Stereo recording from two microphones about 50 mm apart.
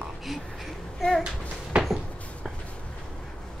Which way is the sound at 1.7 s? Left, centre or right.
Centre.